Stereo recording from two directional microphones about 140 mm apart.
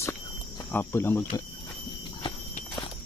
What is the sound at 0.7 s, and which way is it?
Speech, 15° left (ahead or behind).